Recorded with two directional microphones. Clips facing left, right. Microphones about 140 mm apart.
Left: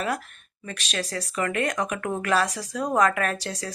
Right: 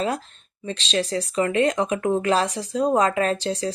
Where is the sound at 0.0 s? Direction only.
25° right (ahead or behind).